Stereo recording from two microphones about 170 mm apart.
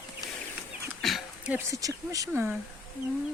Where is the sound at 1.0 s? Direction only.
Centre (ahead or behind).